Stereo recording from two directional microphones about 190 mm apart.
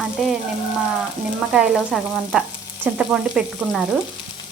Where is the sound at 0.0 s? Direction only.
Centre (ahead or behind).